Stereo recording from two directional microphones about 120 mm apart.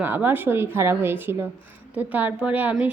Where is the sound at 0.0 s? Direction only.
15° right (ahead or behind).